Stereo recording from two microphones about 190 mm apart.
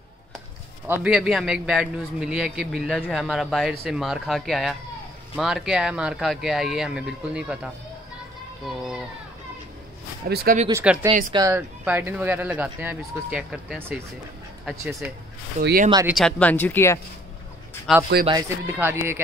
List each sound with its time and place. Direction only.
0.8 s speech: 10° right (ahead or behind)
10.2 s speech: 55° right (ahead or behind)
10.7 s speech: 10° right (ahead or behind)
15.6 s speech: 50° right (ahead or behind)
16.1 s speech: centre (ahead or behind)
17.9 s speech: centre (ahead or behind)
18.7 s speech: 10° right (ahead or behind)